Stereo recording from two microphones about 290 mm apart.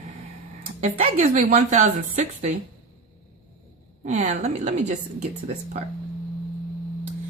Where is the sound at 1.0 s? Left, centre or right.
Right.